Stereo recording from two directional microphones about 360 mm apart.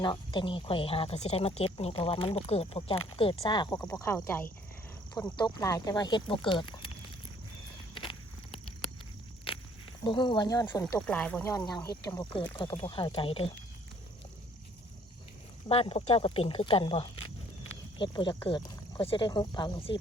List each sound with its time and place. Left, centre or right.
0.0 s speech: centre
10.0 s speech: centre
15.7 s speech: centre